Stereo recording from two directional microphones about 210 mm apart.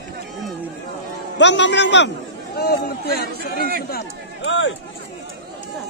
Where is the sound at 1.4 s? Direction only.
55° left (ahead or behind).